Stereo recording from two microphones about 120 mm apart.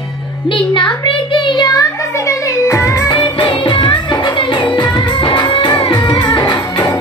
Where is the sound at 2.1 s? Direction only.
25° left (ahead or behind).